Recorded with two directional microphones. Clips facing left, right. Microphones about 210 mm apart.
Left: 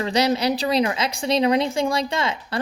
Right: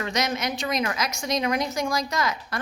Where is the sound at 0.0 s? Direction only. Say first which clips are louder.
Left 7 dB; 30° left (ahead or behind).